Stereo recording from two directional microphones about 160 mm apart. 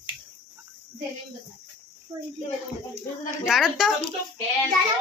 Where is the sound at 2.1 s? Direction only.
15° right (ahead or behind).